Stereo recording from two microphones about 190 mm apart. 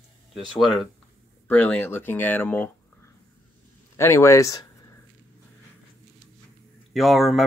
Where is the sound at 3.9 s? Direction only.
15° left (ahead or behind).